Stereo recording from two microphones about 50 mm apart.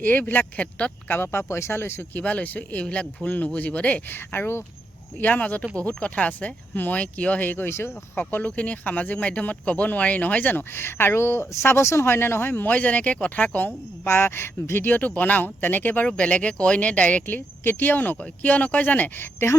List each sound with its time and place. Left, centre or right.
0.0 s speech: left
1.1 s speech: left
2.1 s speech: left
2.8 s speech: left
4.1 s speech: left
5.2 s speech: left
10.8 s speech: left
12.6 s speech: left
13.7 s speech: left
16.0 s speech: left
17.2 s speech: left
19.4 s speech: left